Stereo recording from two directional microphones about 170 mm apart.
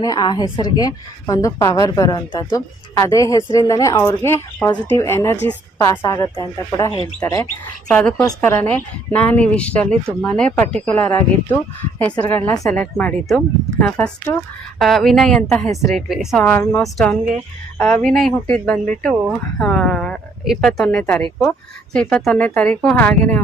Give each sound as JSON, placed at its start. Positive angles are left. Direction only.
{"t": 0.0, "sound": "a woman's voice", "side_deg": 25}
{"t": 7.9, "sound": "speech", "side_deg": 5}
{"t": 8.2, "sound": "speech", "side_deg": 15}
{"t": 16.4, "sound": "speech", "side_deg": 10}
{"t": 18.0, "sound": "speech", "side_deg": 0}